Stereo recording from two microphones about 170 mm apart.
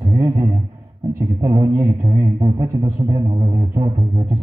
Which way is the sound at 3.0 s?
30° right (ahead or behind).